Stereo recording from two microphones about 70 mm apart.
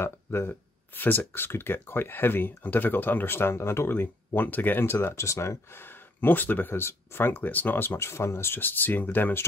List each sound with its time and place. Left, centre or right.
0.0 s speech: left
5.1 s speech: left